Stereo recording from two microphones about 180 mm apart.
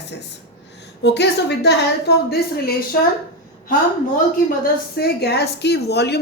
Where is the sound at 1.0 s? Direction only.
70° left (ahead or behind).